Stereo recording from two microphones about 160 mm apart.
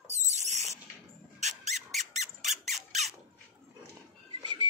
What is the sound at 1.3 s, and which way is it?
Dog, 45° right (ahead or behind).